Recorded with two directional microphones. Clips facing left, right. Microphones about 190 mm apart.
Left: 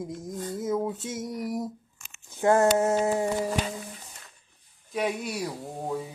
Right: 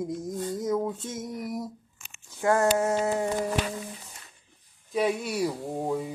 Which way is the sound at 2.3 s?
25° left (ahead or behind).